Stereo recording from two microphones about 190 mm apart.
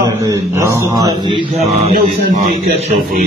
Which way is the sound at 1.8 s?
35° right (ahead or behind).